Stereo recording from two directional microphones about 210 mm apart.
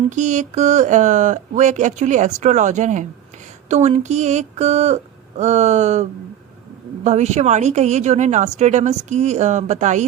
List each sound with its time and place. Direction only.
0.2 s a woman's voice: 35° right (ahead or behind)